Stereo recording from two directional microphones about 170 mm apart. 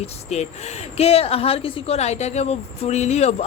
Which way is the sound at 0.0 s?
40° left (ahead or behind).